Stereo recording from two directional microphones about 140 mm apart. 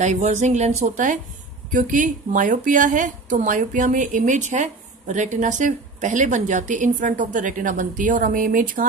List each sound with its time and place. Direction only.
0.0 s a woman's voice: 55° right (ahead or behind); by 8.8 s 75° right (ahead or behind)